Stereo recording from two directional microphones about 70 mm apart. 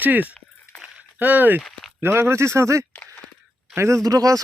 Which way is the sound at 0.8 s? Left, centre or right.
Right.